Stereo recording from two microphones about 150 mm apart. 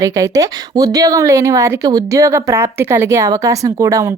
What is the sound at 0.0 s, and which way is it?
Speech, 20° right (ahead or behind).